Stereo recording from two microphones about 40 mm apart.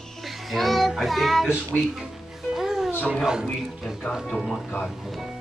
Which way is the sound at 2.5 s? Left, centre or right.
Centre.